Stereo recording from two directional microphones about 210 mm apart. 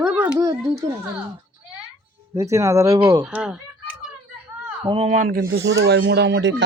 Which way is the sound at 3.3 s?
5° right (ahead or behind).